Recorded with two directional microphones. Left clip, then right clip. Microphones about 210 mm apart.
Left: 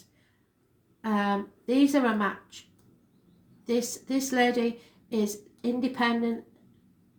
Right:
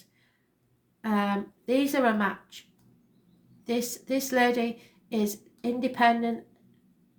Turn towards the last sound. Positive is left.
turn(degrees=-40)  # may be behind; listen again after turning